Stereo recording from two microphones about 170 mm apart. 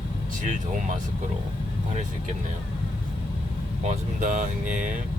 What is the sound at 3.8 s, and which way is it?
Speech, 50° right (ahead or behind).